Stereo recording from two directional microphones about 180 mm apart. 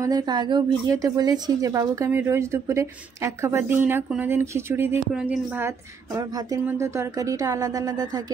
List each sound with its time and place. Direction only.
0.0 s a woman's voice: 25° right (ahead or behind)
6.1 s speech: 20° right (ahead or behind)